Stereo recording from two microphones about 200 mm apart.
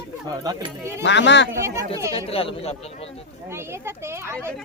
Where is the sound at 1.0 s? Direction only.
60° left (ahead or behind).